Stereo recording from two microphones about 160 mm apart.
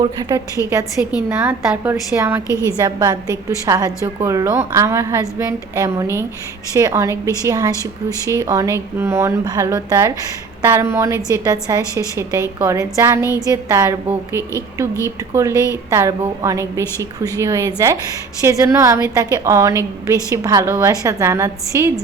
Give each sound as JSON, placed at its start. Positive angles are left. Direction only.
{"t": 0.0, "sound": "a woman's voice", "side_deg": -20}
{"t": 1.0, "sound": "a woman's voice", "side_deg": -10}
{"t": 2.5, "sound": "a woman's voice", "side_deg": 15}
{"t": 2.8, "sound": "a woman's voice", "side_deg": -25}
{"t": 7.7, "sound": "a woman's voice", "side_deg": 15}
{"t": 8.3, "sound": "a woman's voice", "side_deg": -20}
{"t": 13.2, "sound": "music", "side_deg": 20}
{"t": 13.7, "sound": "a woman's voice", "side_deg": -15}
{"t": 15.5, "sound": "music", "side_deg": 20}
{"t": 15.9, "sound": "a woman's voice", "side_deg": -15}